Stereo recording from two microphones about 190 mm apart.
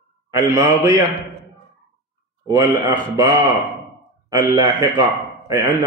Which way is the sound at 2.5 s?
20° right (ahead or behind).